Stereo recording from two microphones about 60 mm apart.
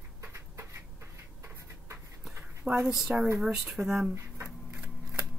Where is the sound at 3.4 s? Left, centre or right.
Centre.